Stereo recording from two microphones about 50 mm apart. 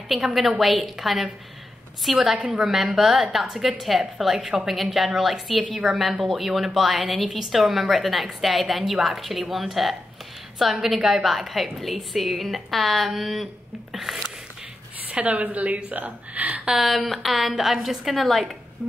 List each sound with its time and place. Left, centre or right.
0.6 s a woman's voice: centre
5.6 s a woman's voice: right
5.9 s a woman's voice: centre
15.0 s speech: right
16.6 s a woman's voice: centre